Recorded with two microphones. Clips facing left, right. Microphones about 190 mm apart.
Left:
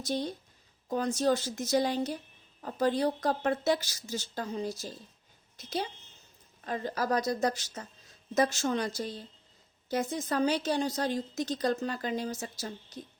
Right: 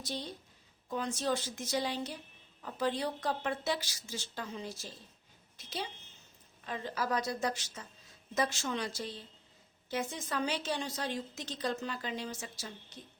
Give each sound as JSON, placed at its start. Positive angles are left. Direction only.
{"t": 0.0, "sound": "a woman's voice", "side_deg": 45}